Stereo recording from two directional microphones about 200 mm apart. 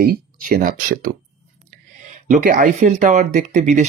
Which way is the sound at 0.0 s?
45° right (ahead or behind).